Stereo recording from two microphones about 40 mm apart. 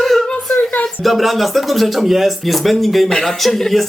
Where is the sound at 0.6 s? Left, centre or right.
Left.